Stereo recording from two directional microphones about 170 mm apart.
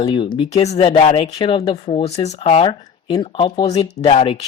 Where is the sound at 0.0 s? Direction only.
30° left (ahead or behind).